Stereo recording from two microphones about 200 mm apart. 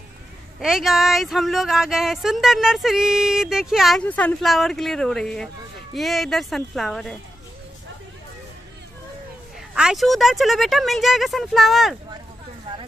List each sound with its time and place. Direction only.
0.6 s speech: centre (ahead or behind)
9.8 s speech: centre (ahead or behind)